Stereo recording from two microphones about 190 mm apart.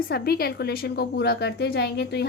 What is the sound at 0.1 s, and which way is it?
A woman's voice, 55° left (ahead or behind).